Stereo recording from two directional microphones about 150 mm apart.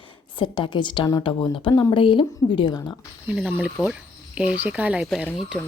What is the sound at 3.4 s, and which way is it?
Speech, 10° right (ahead or behind).